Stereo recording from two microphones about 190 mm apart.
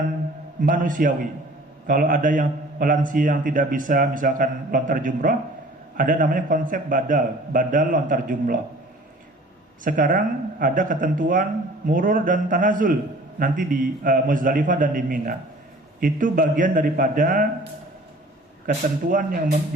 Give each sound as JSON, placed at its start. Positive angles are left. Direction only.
{"t": 0.6, "sound": "a man's voice", "side_deg": -45}
{"t": 9.8, "sound": "a man's voice", "side_deg": -45}